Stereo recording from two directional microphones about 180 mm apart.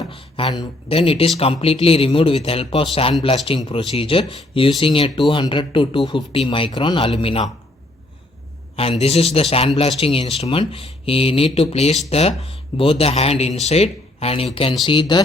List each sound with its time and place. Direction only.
0.0 s speech: 30° left (ahead or behind)
8.7 s speech: 35° left (ahead or behind)